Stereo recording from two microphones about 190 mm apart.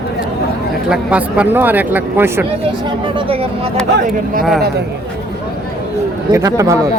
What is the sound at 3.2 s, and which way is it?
Speech, 30° right (ahead or behind).